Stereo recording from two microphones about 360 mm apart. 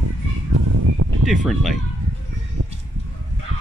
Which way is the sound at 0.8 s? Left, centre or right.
Right.